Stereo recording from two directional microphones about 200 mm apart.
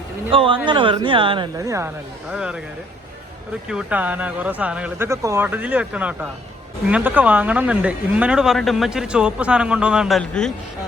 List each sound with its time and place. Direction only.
0.3 s speech: 25° right (ahead or behind)
2.3 s speech: 5° right (ahead or behind)
3.7 s speech: 5° right (ahead or behind)